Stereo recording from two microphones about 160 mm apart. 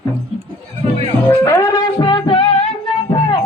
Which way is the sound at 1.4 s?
20° left (ahead or behind).